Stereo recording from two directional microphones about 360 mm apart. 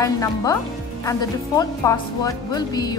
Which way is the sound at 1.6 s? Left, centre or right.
Centre.